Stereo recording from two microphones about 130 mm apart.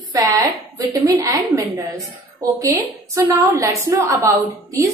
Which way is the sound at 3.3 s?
25° right (ahead or behind).